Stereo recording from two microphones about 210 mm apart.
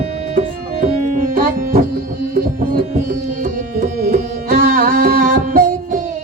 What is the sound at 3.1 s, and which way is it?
Music, 40° right (ahead or behind).